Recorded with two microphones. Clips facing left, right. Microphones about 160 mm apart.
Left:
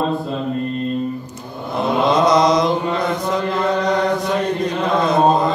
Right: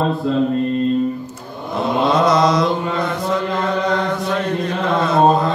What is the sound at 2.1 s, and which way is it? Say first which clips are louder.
Mantra: left 1 dB; 20° left (ahead or behind).